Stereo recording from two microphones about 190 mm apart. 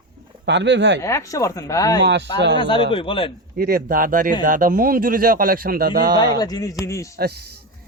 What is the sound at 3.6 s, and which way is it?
Speech, 50° right (ahead or behind).